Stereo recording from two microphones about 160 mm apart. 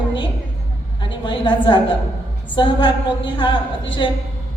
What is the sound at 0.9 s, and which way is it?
A woman's voice, 30° left (ahead or behind).